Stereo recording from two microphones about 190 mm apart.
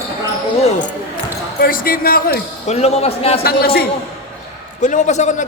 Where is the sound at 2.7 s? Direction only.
35° left (ahead or behind).